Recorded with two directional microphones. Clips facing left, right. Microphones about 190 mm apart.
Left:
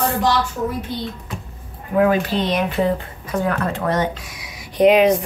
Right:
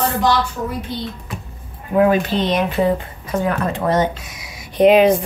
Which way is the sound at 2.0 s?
20° right (ahead or behind).